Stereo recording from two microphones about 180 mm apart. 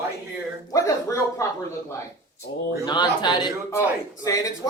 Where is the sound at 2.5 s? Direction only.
80° left.